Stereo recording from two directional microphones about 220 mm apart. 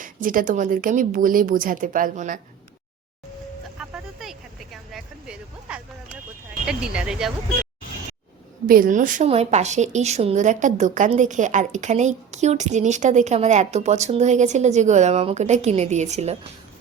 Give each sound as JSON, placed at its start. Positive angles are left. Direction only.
{"t": 0.0, "sound": "a woman's voice", "side_deg": -40}
{"t": 3.8, "sound": "vehicle", "side_deg": -5}
{"t": 6.7, "sound": "speech", "side_deg": -5}
{"t": 8.6, "sound": "a woman's voice", "side_deg": -40}